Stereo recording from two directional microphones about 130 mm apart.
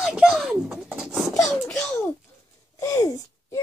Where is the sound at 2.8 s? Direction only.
25° left (ahead or behind).